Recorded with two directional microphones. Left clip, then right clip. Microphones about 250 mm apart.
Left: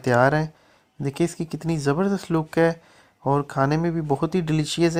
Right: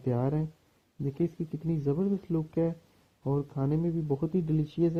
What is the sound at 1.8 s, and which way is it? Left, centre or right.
Speech, centre.